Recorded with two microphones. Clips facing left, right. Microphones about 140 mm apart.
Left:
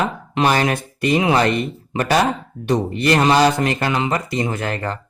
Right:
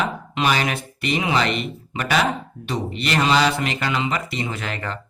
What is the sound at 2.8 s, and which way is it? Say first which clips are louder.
Speech: left 3 dB; 50° left (ahead or behind).